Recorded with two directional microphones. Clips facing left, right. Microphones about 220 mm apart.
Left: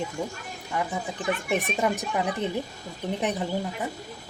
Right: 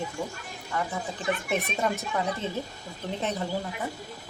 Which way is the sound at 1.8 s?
15° left (ahead or behind).